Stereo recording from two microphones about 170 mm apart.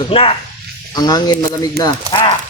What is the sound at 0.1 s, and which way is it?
Speech, 35° left (ahead or behind).